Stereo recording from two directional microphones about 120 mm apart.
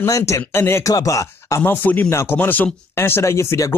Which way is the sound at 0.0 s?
25° left (ahead or behind).